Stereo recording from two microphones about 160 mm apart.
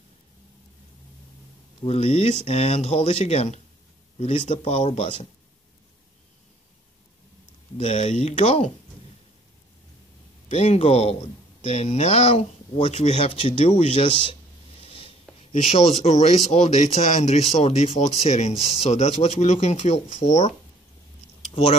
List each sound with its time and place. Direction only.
1.9 s speech: 40° left (ahead or behind)
7.7 s speech: 45° left (ahead or behind)
10.5 s speech: 45° left (ahead or behind)
14.8 s a sound: 35° left (ahead or behind)
15.5 s speech: 45° left (ahead or behind)